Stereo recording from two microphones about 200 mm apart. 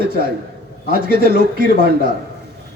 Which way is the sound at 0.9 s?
50° right (ahead or behind).